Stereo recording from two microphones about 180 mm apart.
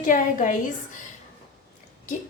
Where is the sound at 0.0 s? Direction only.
45° left (ahead or behind).